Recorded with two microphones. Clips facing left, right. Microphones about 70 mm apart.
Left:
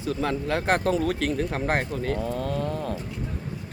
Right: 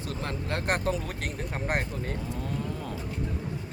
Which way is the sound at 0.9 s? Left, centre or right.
Left.